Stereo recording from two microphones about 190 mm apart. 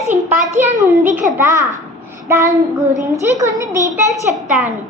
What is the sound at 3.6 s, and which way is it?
Speech, 20° left (ahead or behind).